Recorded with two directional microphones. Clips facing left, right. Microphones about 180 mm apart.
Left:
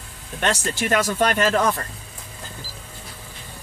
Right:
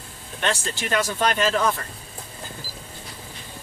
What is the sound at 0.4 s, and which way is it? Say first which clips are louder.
Speech: left 3 dB; 50° left (ahead or behind).